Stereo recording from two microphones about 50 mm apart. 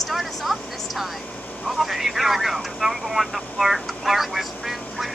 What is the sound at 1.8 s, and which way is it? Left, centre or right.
Vehicle, centre.